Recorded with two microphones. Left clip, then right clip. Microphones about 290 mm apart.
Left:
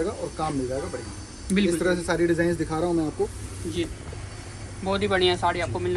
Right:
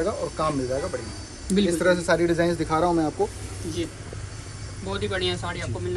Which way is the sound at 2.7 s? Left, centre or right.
Centre.